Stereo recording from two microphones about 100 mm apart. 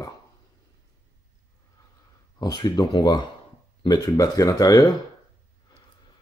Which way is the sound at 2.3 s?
40° left (ahead or behind).